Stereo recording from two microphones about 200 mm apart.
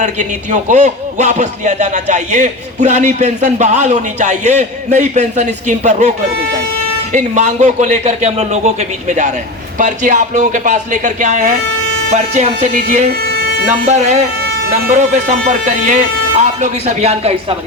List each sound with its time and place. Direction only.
0.0 s a man's voice: 35° right (ahead or behind)